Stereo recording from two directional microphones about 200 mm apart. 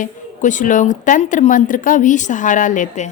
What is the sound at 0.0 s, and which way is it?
A woman's voice, 40° left (ahead or behind).